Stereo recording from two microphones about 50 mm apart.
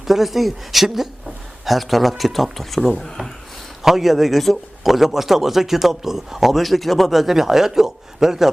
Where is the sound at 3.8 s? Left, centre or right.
Centre.